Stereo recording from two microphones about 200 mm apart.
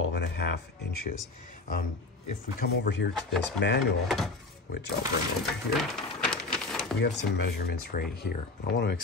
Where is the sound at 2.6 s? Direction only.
60° left (ahead or behind).